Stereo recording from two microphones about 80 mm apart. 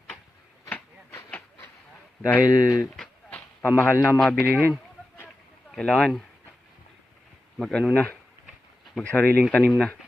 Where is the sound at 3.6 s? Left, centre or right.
Left.